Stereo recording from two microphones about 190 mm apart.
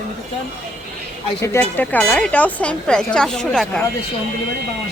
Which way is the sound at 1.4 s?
10° left (ahead or behind).